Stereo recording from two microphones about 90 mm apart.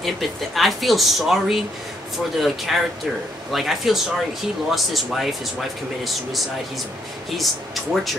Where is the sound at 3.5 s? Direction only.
Centre (ahead or behind).